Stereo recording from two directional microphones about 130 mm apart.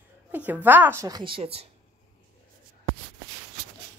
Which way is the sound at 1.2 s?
45° right (ahead or behind).